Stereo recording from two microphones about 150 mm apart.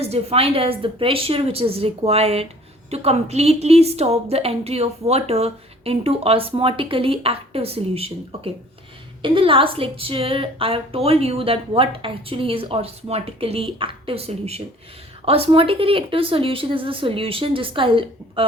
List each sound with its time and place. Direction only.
0.0 s a woman's voice: 45° right (ahead or behind)